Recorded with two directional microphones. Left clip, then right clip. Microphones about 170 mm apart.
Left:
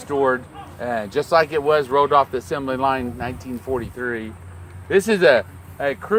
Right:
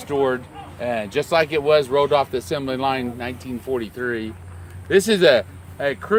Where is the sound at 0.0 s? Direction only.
20° right (ahead or behind).